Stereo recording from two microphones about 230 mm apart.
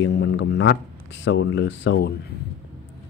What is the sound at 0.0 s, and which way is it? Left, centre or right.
Speech, left.